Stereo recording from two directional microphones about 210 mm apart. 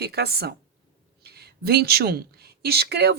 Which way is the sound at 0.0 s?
50° right (ahead or behind).